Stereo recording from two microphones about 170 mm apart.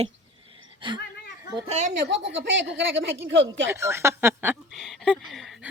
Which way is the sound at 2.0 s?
90° right.